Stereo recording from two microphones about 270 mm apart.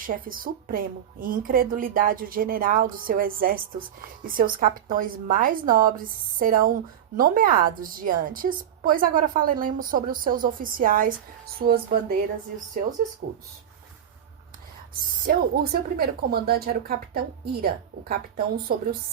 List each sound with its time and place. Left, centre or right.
0.0 s a woman's voice: right
13.2 s a woman's voice: right
15.3 s a woman's voice: right
18.7 s a woman's voice: right